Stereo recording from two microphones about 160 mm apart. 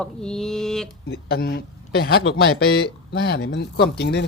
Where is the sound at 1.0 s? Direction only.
75° left (ahead or behind).